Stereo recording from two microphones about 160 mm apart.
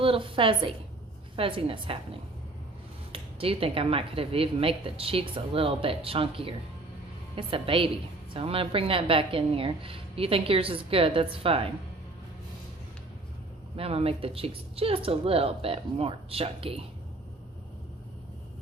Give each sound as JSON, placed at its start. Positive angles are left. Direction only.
{"t": 0.0, "sound": "speech", "side_deg": -35}
{"t": 3.1, "sound": "speech", "side_deg": -35}
{"t": 13.7, "sound": "speech", "side_deg": -35}